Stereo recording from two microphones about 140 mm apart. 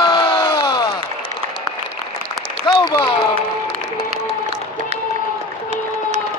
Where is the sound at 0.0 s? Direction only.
35° left (ahead or behind).